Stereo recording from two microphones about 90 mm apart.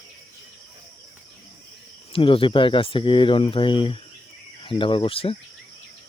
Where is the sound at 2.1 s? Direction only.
90° left.